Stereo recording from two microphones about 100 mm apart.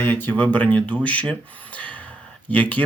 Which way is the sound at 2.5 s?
15° left (ahead or behind).